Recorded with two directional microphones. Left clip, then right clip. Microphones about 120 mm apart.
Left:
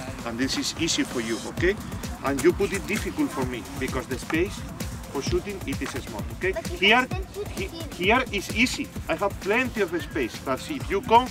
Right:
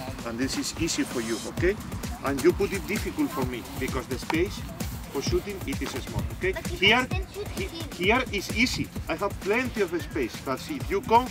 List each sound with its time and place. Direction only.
0.4 s speech: 25° left (ahead or behind)
3.8 s speech: 5° left (ahead or behind)
8.1 s speech: 15° left (ahead or behind)